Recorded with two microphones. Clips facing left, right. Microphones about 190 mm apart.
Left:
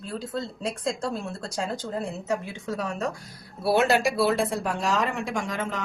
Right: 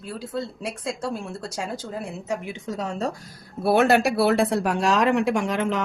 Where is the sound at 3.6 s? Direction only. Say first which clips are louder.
Right 3 dB; 55° right (ahead or behind).